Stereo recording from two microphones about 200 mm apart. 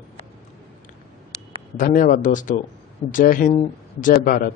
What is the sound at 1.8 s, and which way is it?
A man's voice, 40° left (ahead or behind).